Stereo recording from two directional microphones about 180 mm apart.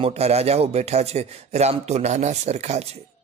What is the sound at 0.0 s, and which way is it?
A man's voice, 35° right (ahead or behind).